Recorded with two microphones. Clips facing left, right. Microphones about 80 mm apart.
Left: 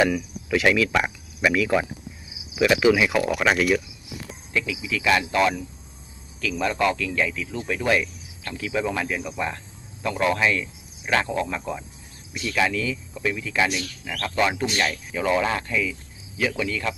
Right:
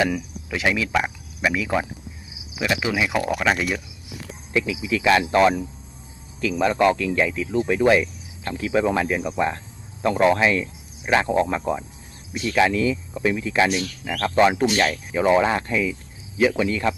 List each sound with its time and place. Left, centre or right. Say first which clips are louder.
0.6 s speech: even; centre
2.6 s cricket: left 5 dB; centre
3.1 s speech: left 1 dB; centre
3.3 s cricket: even; centre
4.5 s speech: right 4 dB; right